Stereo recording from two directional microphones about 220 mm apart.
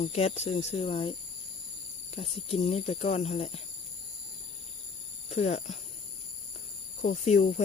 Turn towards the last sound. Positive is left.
turn(degrees=30)  # may be behind; listen again after turning